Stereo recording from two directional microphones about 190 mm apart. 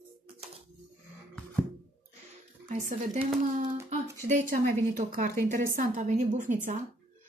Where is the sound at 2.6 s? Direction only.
40° right (ahead or behind).